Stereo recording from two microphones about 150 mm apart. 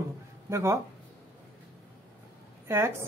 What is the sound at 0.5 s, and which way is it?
Speech, 15° right (ahead or behind).